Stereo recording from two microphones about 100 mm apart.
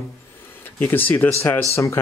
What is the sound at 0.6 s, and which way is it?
Speech, 20° left (ahead or behind).